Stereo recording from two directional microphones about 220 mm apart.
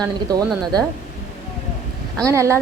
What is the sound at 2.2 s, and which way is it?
Speech, 15° right (ahead or behind).